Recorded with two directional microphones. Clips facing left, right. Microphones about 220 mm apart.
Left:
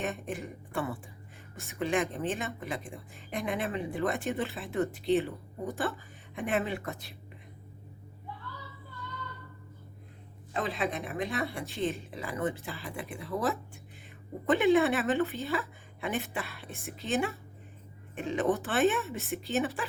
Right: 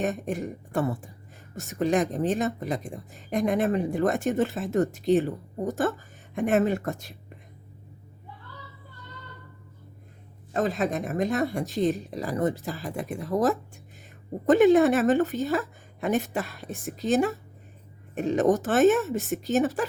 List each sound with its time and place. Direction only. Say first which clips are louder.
0.0 s speech: right 7 dB; 40° right (ahead or behind)
10.5 s speech: right 6 dB; 45° right (ahead or behind)